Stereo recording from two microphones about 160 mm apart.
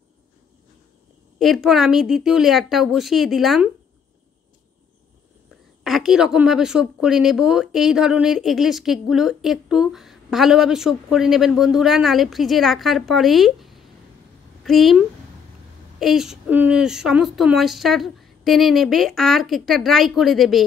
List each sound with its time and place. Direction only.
1.4 s a woman's voice: centre (ahead or behind)
5.9 s a woman's voice: centre (ahead or behind)